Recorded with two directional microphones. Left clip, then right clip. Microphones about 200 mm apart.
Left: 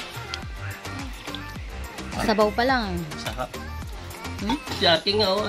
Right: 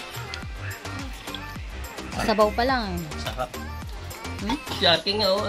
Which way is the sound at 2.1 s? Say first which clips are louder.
Even; 5° left (ahead or behind).